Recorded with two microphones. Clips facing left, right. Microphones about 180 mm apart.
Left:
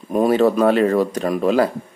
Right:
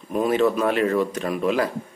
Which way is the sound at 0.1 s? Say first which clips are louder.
Left 4 dB; 40° left (ahead or behind).